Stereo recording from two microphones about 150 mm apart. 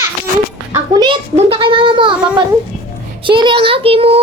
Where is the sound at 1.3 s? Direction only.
40° right (ahead or behind).